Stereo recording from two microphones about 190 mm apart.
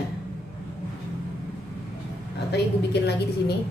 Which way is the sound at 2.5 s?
60° left (ahead or behind).